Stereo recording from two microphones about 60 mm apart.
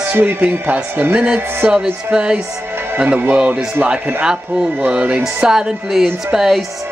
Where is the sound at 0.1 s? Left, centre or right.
Right.